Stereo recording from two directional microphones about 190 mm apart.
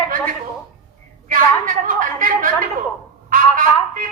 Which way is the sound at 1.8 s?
45° right (ahead or behind).